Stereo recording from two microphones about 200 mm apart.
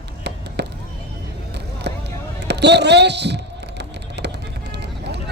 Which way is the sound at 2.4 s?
55° right (ahead or behind).